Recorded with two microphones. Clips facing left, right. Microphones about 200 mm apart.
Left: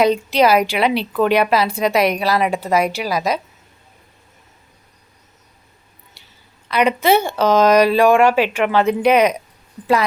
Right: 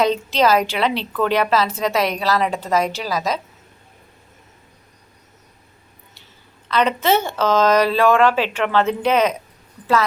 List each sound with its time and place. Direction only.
0.0 s a woman's voice: 10° left (ahead or behind)
6.7 s a woman's voice: 10° left (ahead or behind)